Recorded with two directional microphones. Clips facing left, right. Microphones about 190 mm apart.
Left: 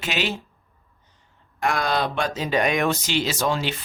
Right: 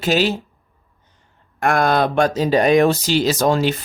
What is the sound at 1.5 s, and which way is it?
Speech, 50° right (ahead or behind).